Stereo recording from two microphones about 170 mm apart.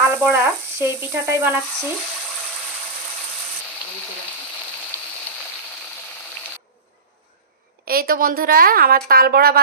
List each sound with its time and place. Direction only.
0.0 s frying: 10° right (ahead or behind)
7.9 s a woman's voice: 60° right (ahead or behind)